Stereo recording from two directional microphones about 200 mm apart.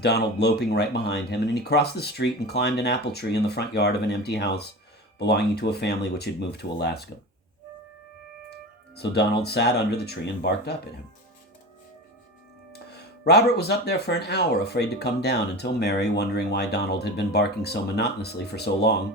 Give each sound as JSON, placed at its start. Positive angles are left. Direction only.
{"t": 0.0, "sound": "speech", "side_deg": 55}
{"t": 9.0, "sound": "speech", "side_deg": 55}
{"t": 12.9, "sound": "speech", "side_deg": 55}